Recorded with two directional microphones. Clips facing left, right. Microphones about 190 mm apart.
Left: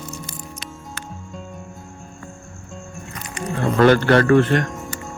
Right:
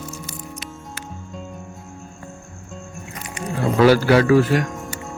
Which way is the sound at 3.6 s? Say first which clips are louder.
Even; 5° right (ahead or behind).